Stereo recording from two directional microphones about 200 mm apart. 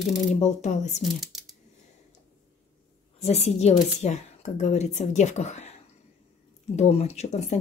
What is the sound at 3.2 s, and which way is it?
A woman's voice, 35° left (ahead or behind).